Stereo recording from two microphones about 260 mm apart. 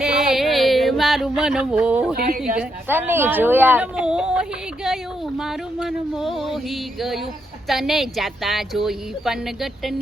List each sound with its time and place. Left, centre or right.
0.0 s a sound: centre
2.1 s a woman's voice: right
2.6 s a woman's voice: centre